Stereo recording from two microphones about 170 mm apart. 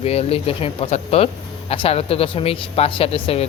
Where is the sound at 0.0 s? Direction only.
35° left (ahead or behind).